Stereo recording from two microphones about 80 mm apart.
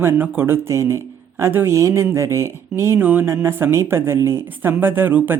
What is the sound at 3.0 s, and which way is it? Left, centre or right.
A woman's voice, right.